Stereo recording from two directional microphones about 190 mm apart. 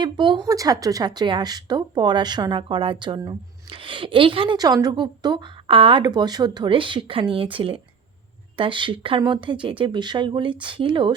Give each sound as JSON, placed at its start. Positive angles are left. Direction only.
{"t": 0.0, "sound": "speech", "side_deg": -25}